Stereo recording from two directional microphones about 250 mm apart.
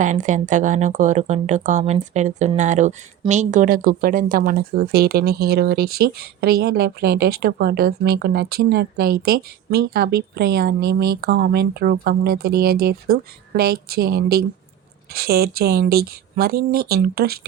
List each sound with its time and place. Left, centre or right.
0.0 s speech: right